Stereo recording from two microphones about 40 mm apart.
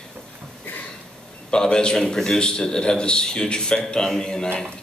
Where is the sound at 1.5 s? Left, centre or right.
Centre.